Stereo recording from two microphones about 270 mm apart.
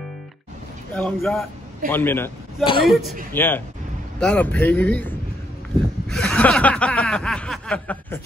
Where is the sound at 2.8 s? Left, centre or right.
Centre.